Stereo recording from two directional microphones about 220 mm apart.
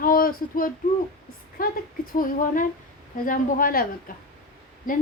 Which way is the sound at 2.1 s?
40° left (ahead or behind).